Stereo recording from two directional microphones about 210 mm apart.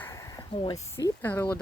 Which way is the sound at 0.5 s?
25° left (ahead or behind).